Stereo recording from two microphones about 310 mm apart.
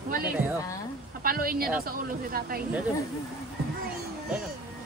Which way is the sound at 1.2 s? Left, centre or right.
Right.